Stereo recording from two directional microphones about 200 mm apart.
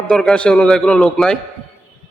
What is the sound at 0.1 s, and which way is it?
A man's voice, 5° left (ahead or behind).